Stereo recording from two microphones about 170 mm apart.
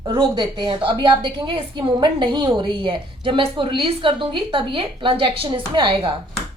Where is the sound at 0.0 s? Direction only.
25° right (ahead or behind).